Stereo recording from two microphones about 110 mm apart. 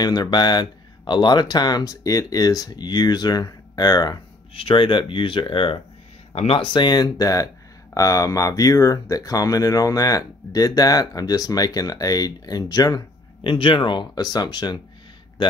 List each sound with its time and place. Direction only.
0.0 s speech: 40° left (ahead or behind)
4.6 s speech: 50° left (ahead or behind)
6.3 s speech: 65° left (ahead or behind)
6.6 s speech: 45° left (ahead or behind)